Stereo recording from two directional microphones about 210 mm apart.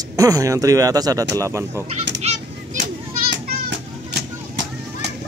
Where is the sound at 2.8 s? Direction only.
55° right (ahead or behind).